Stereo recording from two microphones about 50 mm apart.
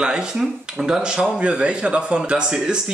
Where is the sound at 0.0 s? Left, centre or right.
Centre.